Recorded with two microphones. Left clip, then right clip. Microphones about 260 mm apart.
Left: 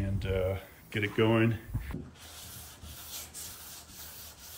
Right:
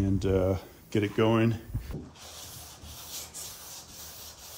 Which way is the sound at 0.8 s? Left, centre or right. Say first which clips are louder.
Right 4 dB; centre.